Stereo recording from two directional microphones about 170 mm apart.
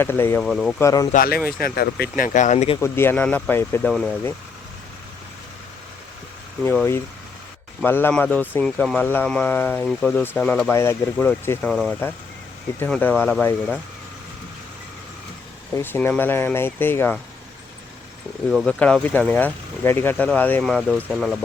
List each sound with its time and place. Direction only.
0.0 s speech: 15° left (ahead or behind)
0.4 s speech: centre (ahead or behind)
0.8 s speech: 20° left (ahead or behind)
1.1 s speech: 60° left (ahead or behind); by 2.7 s 40° left (ahead or behind)
2.8 s speech: 15° left (ahead or behind)
3.8 s speech: 5° left (ahead or behind)
6.7 s speech: 15° left (ahead or behind)
15.7 s speech: 10° left (ahead or behind)
18.5 s speech: centre (ahead or behind)